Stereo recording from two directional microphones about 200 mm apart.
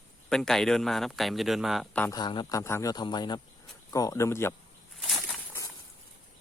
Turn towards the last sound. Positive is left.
turn(degrees=0)  # may be behind; listen again after turning